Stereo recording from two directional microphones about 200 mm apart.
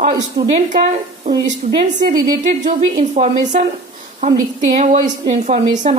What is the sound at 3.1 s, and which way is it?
Speech, 35° right (ahead or behind).